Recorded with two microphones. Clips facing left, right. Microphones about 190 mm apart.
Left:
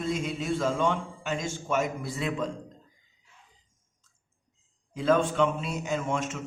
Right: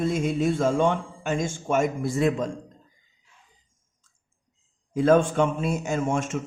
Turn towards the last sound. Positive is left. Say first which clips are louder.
# right 4 dB
turn(degrees=-50)  # may be behind; listen again after turning